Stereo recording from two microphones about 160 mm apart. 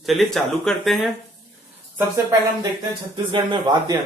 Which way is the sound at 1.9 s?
20° right (ahead or behind).